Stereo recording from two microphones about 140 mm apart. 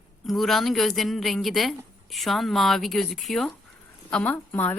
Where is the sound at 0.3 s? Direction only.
Centre (ahead or behind).